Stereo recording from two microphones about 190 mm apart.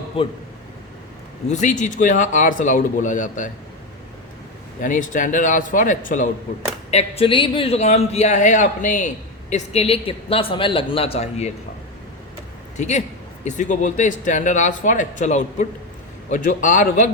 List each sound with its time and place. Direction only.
0.2 s speech: 30° left (ahead or behind)
1.5 s a man's voice: 40° left (ahead or behind)
4.8 s speech: 40° left (ahead or behind)
6.9 s a man's voice: 30° left (ahead or behind)
12.7 s a man's voice: 40° left (ahead or behind)